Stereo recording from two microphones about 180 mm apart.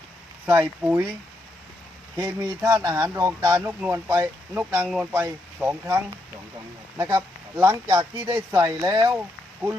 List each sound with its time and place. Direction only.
0.8 s speech: 10° right (ahead or behind)
2.1 s speech: 20° right (ahead or behind)